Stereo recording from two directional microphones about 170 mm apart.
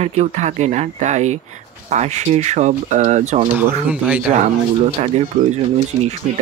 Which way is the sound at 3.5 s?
10° right (ahead or behind).